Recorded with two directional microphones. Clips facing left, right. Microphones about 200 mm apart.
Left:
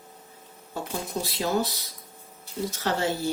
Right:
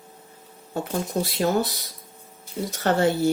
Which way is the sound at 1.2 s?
55° right (ahead or behind).